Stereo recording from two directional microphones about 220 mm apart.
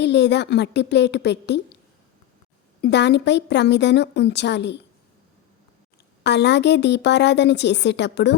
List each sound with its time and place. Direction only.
0.0 s a woman's voice: 50° left (ahead or behind)
2.8 s a woman's voice: 50° left (ahead or behind)
6.2 s a woman's voice: 50° left (ahead or behind)